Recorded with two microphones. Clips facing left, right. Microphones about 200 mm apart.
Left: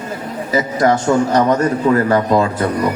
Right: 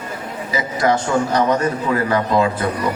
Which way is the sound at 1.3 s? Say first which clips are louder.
Left 3 dB; 45° left (ahead or behind).